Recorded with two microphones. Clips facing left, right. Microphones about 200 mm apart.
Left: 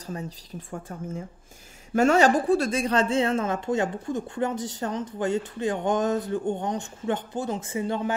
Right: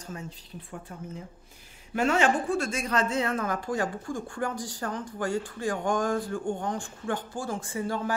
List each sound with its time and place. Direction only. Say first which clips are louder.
0.0 s a woman's voice: left 5 dB; 40° left (ahead or behind); by 8.1 s 20° left (ahead or behind)